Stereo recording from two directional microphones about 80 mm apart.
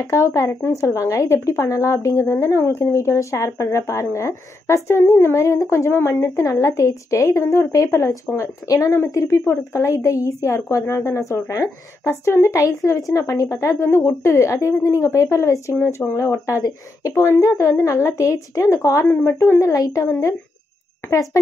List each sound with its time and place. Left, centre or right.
0.0 s speech: left
19.2 s a woman's voice: left
19.6 s speech: left